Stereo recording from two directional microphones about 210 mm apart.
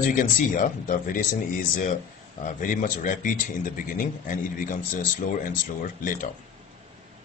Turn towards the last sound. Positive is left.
turn(degrees=40)  # may be behind; listen again after turning